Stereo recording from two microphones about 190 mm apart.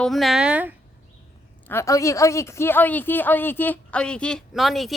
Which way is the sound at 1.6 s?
15° left (ahead or behind).